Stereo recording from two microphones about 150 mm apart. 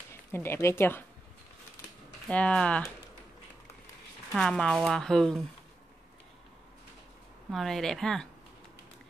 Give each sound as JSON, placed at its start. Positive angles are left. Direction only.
{"t": 0.1, "sound": "speech", "side_deg": 15}
{"t": 2.2, "sound": "speech", "side_deg": 5}
{"t": 4.3, "sound": "speech", "side_deg": 5}
{"t": 7.5, "sound": "speech", "side_deg": 0}